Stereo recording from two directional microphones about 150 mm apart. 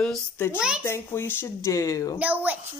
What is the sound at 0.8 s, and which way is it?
Speech, 15° left (ahead or behind).